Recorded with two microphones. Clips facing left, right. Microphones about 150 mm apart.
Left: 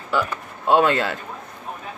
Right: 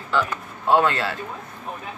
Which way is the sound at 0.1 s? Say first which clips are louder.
Even; 15° left (ahead or behind).